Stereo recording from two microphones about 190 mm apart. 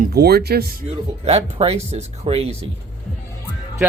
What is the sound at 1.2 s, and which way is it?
Speech, 35° right (ahead or behind).